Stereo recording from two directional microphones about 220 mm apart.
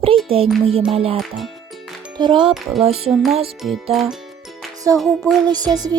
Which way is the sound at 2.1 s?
20° right (ahead or behind).